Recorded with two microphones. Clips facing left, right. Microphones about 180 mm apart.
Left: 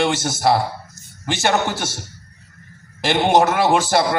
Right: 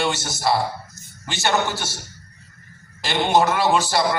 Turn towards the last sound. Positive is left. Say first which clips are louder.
# left 3 dB
turn(degrees=50)  # may be behind; listen again after turning